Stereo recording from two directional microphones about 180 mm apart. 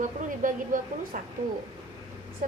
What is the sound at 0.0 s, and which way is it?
A woman's voice, 45° right (ahead or behind).